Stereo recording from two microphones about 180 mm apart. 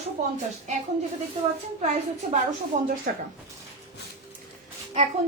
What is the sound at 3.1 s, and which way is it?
Speech, 55° right (ahead or behind).